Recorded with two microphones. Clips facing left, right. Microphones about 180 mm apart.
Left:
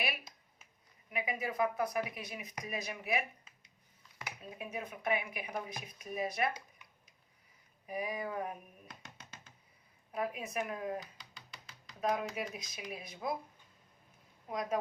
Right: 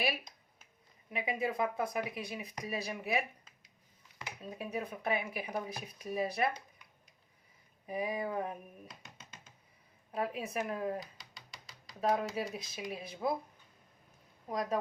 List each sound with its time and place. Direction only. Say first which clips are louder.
1.1 s speech: right 2 dB; 30° right (ahead or behind)
4.4 s speech: right 4 dB; 35° right (ahead or behind)
7.9 s speech: right 3 dB; 25° right (ahead or behind)
10.1 s speech: right 2 dB; 30° right (ahead or behind)
14.5 s speech: right 1 dB; 35° right (ahead or behind)